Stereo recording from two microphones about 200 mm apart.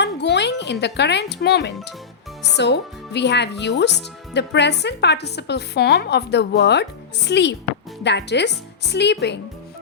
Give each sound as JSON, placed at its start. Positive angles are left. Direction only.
{"t": 0.0, "sound": "speech", "side_deg": 60}